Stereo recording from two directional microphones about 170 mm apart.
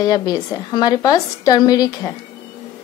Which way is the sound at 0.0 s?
20° left (ahead or behind).